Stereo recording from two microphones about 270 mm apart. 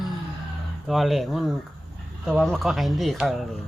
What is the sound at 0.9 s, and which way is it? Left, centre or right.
Speech, centre.